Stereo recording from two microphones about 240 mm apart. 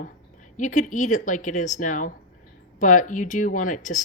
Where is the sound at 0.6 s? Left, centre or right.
Left.